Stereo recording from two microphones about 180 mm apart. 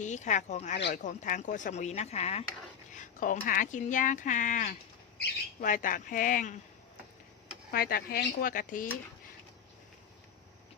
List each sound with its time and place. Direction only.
0.0 s speech: 40° left (ahead or behind)
7.7 s speech: 55° left (ahead or behind)